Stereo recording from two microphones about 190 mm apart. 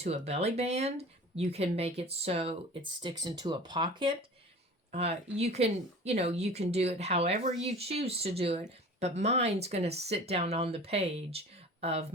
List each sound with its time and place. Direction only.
0.0 s speech: 35° right (ahead or behind)
4.9 s speech: 35° right (ahead or behind)